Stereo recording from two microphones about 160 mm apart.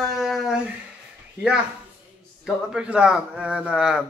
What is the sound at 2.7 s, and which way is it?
A man's voice, 5° right (ahead or behind).